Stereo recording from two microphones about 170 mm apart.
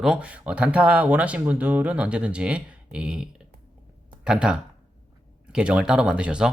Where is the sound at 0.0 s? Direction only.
5° right (ahead or behind).